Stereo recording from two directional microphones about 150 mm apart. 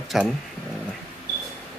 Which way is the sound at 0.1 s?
Centre (ahead or behind).